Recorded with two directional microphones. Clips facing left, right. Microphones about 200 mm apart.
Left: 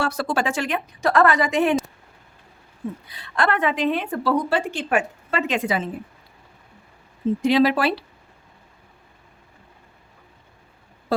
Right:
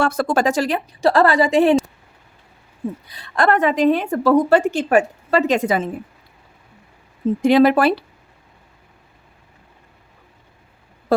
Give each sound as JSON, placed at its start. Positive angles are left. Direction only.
{"t": 0.0, "sound": "a woman's voice", "side_deg": -50}
{"t": 3.1, "sound": "a woman's voice", "side_deg": -40}
{"t": 7.4, "sound": "speech", "side_deg": -50}